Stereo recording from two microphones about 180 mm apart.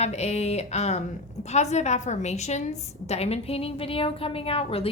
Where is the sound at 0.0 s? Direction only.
35° left (ahead or behind).